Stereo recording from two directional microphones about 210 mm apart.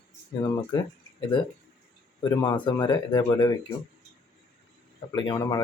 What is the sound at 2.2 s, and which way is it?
Speech, 20° left (ahead or behind).